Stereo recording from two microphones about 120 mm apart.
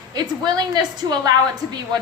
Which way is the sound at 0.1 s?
35° right (ahead or behind).